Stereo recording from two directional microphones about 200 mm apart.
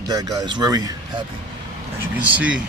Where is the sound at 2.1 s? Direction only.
10° right (ahead or behind).